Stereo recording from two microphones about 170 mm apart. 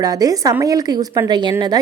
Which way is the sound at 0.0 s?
20° right (ahead or behind).